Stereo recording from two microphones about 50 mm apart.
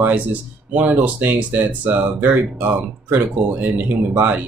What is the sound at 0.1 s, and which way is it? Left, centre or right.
Speech, right.